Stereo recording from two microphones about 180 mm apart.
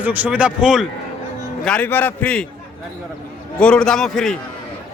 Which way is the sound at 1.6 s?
5° left (ahead or behind).